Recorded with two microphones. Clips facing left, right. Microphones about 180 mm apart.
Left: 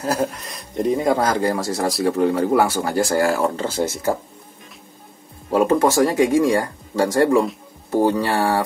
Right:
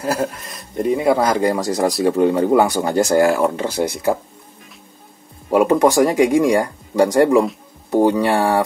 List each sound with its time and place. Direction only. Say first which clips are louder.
0.0 s speech: right 1 dB; centre (ahead or behind)
5.5 s speech: right 3 dB; 15° right (ahead or behind)